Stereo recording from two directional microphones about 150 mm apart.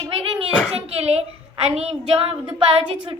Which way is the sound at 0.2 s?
40° right (ahead or behind).